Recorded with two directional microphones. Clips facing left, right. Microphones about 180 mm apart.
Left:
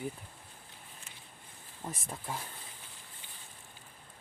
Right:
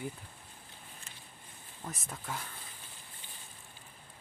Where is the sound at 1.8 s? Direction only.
30° left (ahead or behind).